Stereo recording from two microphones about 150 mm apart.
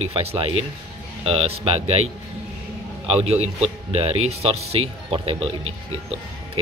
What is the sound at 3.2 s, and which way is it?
Speech, 40° right (ahead or behind).